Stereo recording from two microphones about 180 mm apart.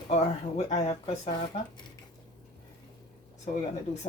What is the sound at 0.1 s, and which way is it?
Speech, 40° left (ahead or behind).